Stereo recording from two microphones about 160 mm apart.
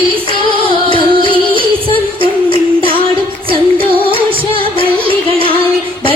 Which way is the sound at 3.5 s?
35° right (ahead or behind).